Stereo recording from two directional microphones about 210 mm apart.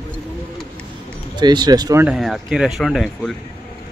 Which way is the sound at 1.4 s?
20° right (ahead or behind).